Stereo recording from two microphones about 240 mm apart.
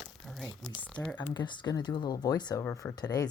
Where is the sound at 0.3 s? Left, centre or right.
Centre.